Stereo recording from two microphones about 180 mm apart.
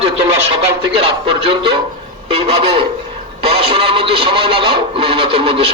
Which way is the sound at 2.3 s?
30° right (ahead or behind).